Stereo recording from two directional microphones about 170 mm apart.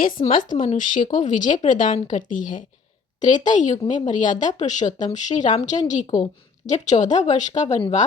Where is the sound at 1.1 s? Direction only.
50° left (ahead or behind).